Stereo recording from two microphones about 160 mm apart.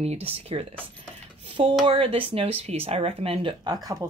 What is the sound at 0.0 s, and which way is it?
Speech, 40° right (ahead or behind).